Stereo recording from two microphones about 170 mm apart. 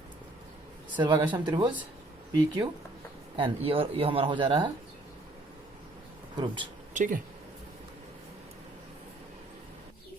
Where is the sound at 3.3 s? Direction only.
30° right (ahead or behind).